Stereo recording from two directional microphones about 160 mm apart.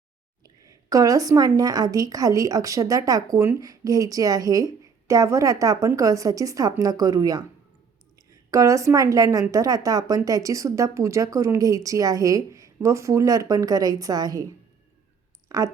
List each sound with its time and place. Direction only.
0.4 s a woman's voice: 20° right (ahead or behind)
15.4 s speech: 20° right (ahead or behind)